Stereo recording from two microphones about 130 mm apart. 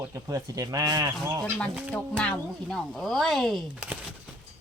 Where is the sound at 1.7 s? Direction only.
5° right (ahead or behind).